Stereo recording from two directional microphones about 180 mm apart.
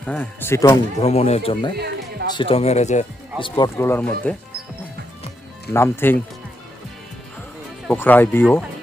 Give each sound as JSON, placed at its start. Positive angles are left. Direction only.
{"t": 0.0, "sound": "speech", "side_deg": 5}
{"t": 1.0, "sound": "speech", "side_deg": 35}
{"t": 1.7, "sound": "a sound", "side_deg": -60}
{"t": 2.3, "sound": "speech", "side_deg": 30}
{"t": 3.4, "sound": "speech", "side_deg": 25}
{"t": 3.8, "sound": "speech", "side_deg": 10}
{"t": 5.7, "sound": "speech", "side_deg": 15}
{"t": 7.9, "sound": "speech", "side_deg": 10}